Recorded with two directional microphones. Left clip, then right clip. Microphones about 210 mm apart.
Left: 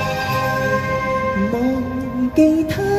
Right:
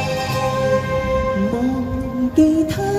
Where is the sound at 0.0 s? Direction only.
25° left (ahead or behind).